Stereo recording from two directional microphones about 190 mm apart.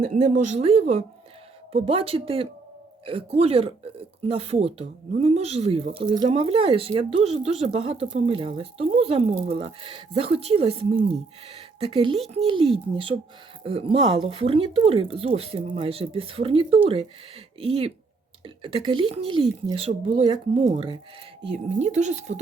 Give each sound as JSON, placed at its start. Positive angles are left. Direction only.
{"t": 0.0, "sound": "speech", "side_deg": -40}
{"t": 21.8, "sound": "speech", "side_deg": -35}